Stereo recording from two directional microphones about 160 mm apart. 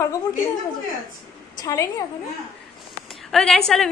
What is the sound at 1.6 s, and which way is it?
Speech, 25° left (ahead or behind).